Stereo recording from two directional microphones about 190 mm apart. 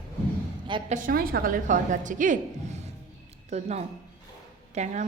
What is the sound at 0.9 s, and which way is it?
A woman's voice, 50° right (ahead or behind).